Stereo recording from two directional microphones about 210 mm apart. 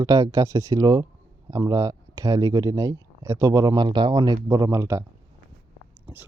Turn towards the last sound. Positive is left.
turn(degrees=-15)  # may be behind; listen again after turning